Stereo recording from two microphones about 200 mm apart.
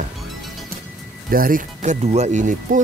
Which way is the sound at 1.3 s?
45° right (ahead or behind).